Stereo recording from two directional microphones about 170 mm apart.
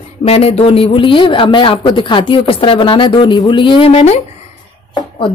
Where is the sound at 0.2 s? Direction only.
35° left (ahead or behind).